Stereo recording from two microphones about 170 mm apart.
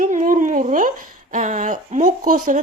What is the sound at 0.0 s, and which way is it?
A woman's voice, 50° right (ahead or behind).